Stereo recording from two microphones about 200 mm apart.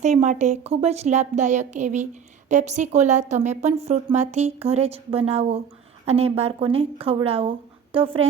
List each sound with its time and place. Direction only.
0.0 s a woman's voice: 35° right (ahead or behind)